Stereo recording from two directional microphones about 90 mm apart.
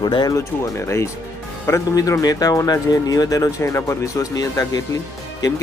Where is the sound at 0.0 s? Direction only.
55° left (ahead or behind).